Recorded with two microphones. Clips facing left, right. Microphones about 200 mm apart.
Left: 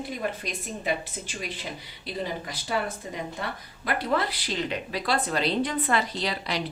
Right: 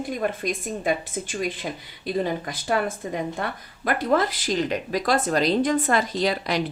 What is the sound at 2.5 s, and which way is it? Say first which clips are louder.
A woman's voice: right 5 dB; 50° right (ahead or behind).